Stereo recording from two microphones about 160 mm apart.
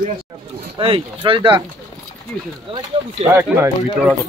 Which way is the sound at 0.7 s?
35° right (ahead or behind).